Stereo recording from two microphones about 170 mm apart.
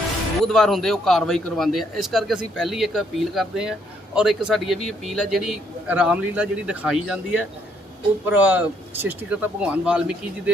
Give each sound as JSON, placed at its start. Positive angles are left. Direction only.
{"t": 0.4, "sound": "a man's voice", "side_deg": 0}